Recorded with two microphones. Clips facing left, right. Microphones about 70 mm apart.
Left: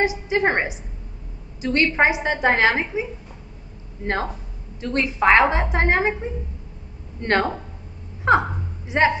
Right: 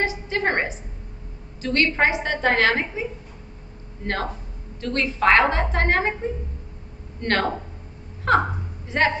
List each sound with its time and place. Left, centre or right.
0.0 s a woman's voice: centre
7.2 s a woman's voice: centre